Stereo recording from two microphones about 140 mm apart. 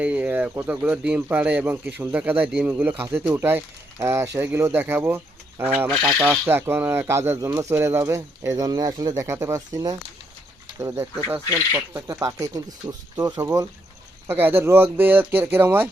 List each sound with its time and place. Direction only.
0.0 s speech: 10° right (ahead or behind)